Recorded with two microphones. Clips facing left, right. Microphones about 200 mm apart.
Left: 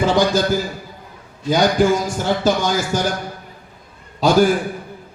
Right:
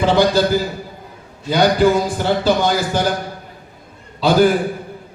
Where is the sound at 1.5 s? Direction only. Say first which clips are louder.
Right 1 dB; 45° left (ahead or behind).